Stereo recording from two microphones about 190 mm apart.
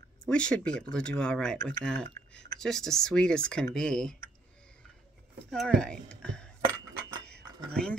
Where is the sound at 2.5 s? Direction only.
Centre (ahead or behind).